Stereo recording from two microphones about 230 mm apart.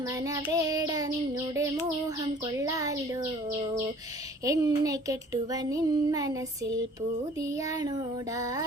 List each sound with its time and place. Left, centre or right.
0.3 s child singing: centre
4.4 s child singing: centre